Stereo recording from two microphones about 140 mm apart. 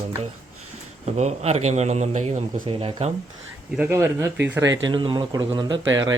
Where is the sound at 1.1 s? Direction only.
50° right (ahead or behind).